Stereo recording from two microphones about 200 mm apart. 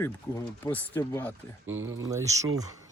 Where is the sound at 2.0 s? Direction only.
15° right (ahead or behind).